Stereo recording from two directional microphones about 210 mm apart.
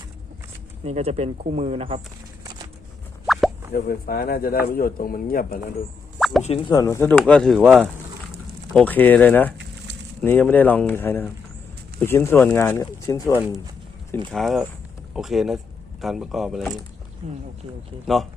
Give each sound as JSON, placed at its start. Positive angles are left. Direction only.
{"t": 0.9, "sound": "speech", "side_deg": -30}
{"t": 3.7, "sound": "speech", "side_deg": 45}
{"t": 6.1, "sound": "plop", "side_deg": 0}
{"t": 6.4, "sound": "speech", "side_deg": 30}
{"t": 6.8, "sound": "speech", "side_deg": 10}
{"t": 8.7, "sound": "speech", "side_deg": 10}
{"t": 14.3, "sound": "speech", "side_deg": 0}
{"t": 17.2, "sound": "speech", "side_deg": -30}